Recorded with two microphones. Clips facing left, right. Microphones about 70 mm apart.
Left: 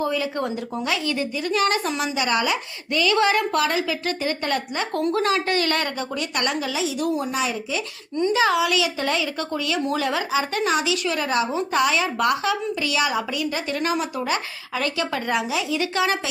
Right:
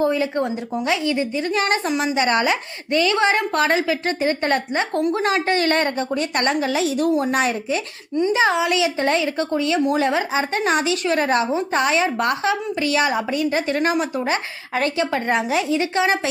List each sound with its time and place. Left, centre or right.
0.0 s a woman's voice: right
2.1 s a woman's voice: right
8.1 s speech: right
15.8 s a woman's voice: right